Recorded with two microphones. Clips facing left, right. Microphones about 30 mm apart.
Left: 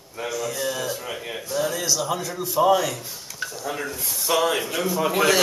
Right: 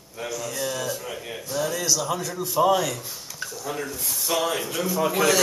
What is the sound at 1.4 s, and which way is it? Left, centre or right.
A man's voice, centre.